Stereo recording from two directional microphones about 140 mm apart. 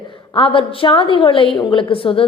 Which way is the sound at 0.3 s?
40° left (ahead or behind).